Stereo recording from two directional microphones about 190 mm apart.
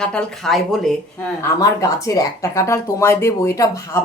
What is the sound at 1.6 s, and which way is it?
Speech, 20° left (ahead or behind).